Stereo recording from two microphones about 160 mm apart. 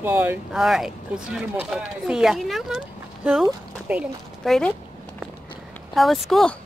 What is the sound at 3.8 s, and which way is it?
Speech, 5° right (ahead or behind).